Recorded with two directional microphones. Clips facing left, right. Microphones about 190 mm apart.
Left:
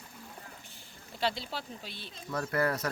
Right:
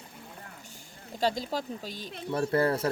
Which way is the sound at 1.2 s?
45° right (ahead or behind).